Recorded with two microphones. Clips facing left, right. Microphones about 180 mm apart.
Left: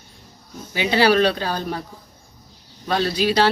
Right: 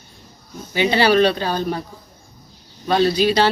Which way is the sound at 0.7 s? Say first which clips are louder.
Right 2 dB; 5° left (ahead or behind).